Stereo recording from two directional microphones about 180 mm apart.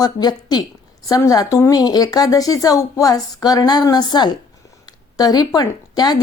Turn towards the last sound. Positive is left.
turn(degrees=20)  # may be behind; listen again after turning